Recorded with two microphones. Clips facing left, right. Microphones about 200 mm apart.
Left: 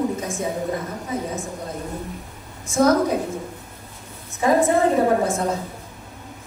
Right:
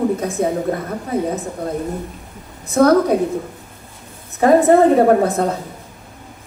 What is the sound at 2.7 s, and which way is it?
Speech, 65° right (ahead or behind).